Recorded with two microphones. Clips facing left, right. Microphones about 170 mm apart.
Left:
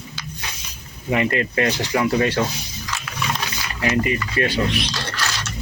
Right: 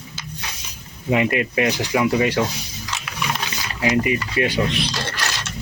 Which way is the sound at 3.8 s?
15° right (ahead or behind).